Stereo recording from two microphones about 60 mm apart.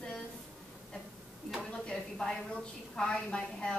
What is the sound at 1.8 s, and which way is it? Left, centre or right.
Speech, centre.